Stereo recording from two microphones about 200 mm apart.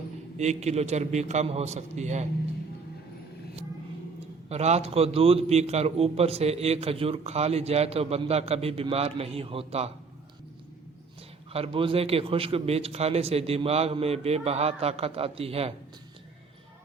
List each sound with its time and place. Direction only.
0.3 s a man's voice: 35° right (ahead or behind)
4.4 s a man's voice: 30° right (ahead or behind)
11.5 s a man's voice: 30° right (ahead or behind)